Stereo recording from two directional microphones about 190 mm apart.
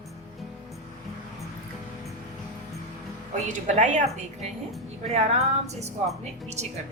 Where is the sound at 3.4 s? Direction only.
40° right (ahead or behind).